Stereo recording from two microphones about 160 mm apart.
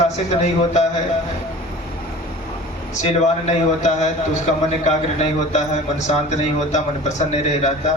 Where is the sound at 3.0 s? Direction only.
45° left (ahead or behind).